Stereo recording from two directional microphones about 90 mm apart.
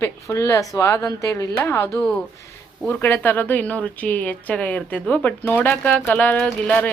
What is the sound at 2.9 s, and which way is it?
A woman's voice, 25° left (ahead or behind).